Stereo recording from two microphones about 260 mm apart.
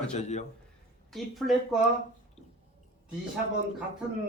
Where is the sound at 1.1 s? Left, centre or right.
Centre.